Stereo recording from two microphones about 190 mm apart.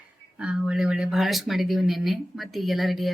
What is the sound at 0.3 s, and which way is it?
Speech, 5° right (ahead or behind).